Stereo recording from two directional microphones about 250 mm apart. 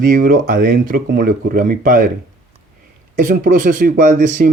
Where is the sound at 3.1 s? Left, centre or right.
Right.